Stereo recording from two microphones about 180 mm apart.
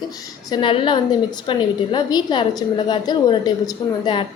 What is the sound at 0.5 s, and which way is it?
A woman's voice, 30° left (ahead or behind).